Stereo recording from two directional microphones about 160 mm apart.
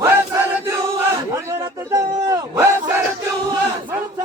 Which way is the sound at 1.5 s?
20° right (ahead or behind).